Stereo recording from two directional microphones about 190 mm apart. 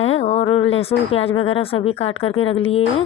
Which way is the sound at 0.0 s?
35° left (ahead or behind).